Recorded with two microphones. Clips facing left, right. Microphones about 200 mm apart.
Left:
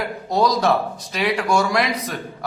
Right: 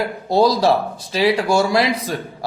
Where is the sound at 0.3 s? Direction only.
30° right (ahead or behind).